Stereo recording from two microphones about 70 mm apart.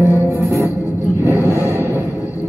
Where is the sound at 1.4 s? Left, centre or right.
Left.